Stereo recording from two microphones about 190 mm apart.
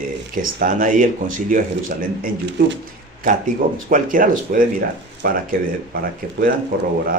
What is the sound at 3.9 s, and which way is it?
Speech, 45° right (ahead or behind).